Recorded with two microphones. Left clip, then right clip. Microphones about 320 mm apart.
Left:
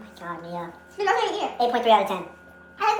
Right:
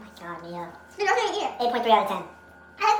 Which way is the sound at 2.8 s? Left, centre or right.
Centre.